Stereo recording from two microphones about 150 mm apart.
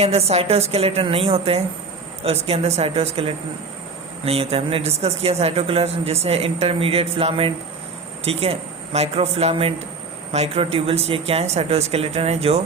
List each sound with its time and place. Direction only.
0.0 s a man's voice: 45° right (ahead or behind)